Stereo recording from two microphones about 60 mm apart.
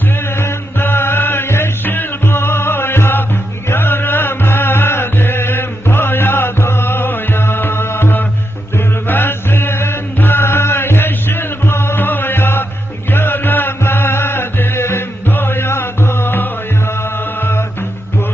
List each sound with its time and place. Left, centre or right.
0.3 s music: left
9.0 s chant: left
13.1 s music: left